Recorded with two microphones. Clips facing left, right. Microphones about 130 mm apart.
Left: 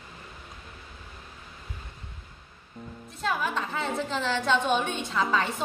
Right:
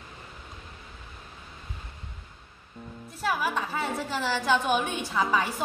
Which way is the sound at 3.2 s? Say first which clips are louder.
Right 1 dB; 5° right (ahead or behind).